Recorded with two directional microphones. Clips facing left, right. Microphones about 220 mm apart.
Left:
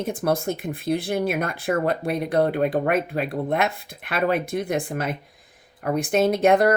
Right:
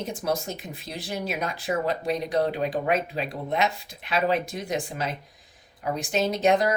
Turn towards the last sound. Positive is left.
turn(degrees=55)  # may be behind; listen again after turning